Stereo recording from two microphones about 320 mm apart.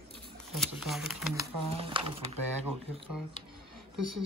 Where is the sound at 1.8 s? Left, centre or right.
Centre.